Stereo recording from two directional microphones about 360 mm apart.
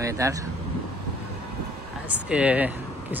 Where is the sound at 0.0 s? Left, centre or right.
Centre.